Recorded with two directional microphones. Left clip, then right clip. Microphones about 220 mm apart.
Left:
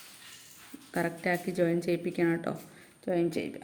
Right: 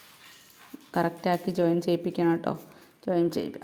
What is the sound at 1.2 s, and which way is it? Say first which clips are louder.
A woman's voice: right 3 dB; 20° right (ahead or behind).